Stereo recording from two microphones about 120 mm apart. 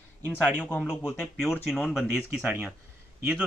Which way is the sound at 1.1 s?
Centre (ahead or behind).